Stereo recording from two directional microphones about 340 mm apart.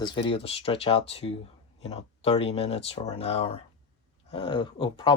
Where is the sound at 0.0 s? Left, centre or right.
Centre.